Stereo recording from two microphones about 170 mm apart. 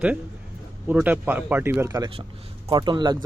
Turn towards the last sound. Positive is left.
turn(degrees=-25)  # may be behind; listen again after turning